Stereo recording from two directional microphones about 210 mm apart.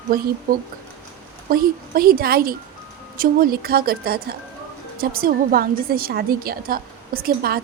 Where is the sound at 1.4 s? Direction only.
45° right (ahead or behind).